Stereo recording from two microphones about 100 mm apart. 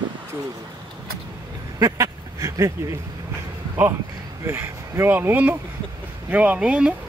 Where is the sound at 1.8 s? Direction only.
35° right (ahead or behind).